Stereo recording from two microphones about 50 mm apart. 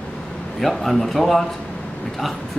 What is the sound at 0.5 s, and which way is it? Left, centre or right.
Speech, centre.